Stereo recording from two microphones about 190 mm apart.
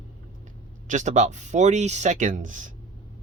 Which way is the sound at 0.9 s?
40° right (ahead or behind).